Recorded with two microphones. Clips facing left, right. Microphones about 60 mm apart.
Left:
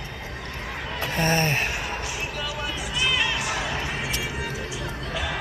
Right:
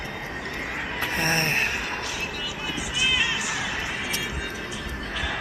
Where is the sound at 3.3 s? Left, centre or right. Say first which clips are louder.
Left 1 dB; left.